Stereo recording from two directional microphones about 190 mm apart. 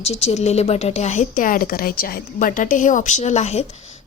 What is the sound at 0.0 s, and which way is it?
A woman's voice, 35° left (ahead or behind).